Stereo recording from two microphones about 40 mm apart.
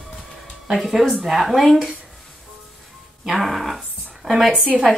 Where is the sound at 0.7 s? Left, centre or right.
Centre.